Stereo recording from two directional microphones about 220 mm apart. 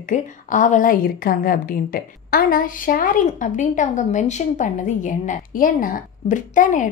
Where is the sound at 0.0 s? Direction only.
35° left (ahead or behind).